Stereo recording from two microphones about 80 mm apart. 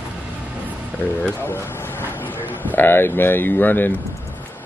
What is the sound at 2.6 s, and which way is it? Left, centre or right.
Speech, left.